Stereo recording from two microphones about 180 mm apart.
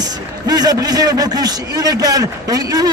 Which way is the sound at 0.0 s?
20° right (ahead or behind).